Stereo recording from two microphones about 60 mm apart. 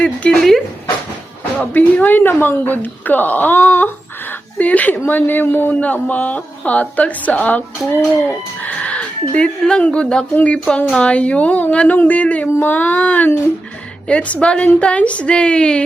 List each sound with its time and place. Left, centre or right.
0.0 s speech: left
1.7 s speech: left
8.6 s a woman's voice: left